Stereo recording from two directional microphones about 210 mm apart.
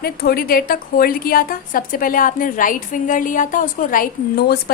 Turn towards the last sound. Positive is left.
turn(degrees=45)  # may be behind; listen again after turning